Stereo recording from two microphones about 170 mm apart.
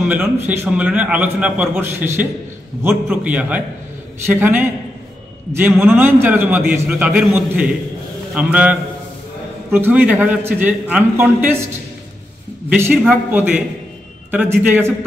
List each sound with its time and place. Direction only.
0.0 s a man's voice: 10° right (ahead or behind)
9.8 s a man's voice: 10° right (ahead or behind)
12.6 s a man's voice: 10° right (ahead or behind)